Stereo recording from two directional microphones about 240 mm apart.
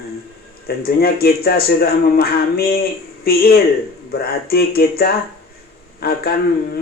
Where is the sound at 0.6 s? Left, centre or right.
Left.